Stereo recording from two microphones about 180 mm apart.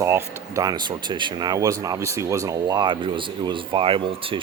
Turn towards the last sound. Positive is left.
turn(degrees=-30)  # may be behind; listen again after turning